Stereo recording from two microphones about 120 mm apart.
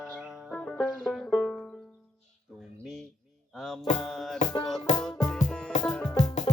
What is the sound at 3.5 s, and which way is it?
Music, centre (ahead or behind).